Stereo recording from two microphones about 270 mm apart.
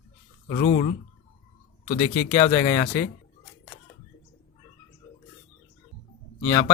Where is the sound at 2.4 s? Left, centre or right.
Left.